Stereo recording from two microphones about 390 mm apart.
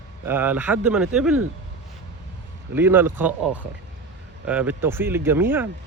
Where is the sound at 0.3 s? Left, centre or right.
Centre.